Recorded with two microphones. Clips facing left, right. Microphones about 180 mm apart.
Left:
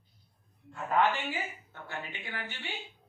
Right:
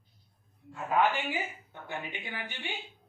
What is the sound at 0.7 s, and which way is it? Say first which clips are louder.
A woman's voice: right 1 dB; 10° right (ahead or behind).